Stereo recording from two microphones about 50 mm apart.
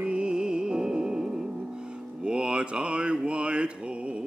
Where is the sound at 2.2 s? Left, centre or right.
Centre.